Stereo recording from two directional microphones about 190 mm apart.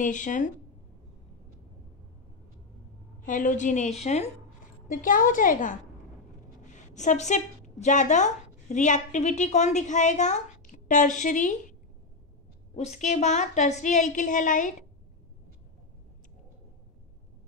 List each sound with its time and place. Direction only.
0.0 s a woman's voice: 40° left (ahead or behind)
3.2 s a woman's voice: 45° left (ahead or behind)
6.9 s speech: 40° left (ahead or behind)
12.7 s a woman's voice: 35° left (ahead or behind)